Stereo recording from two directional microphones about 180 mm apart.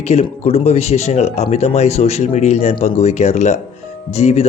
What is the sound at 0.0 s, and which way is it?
Speech, 35° left (ahead or behind).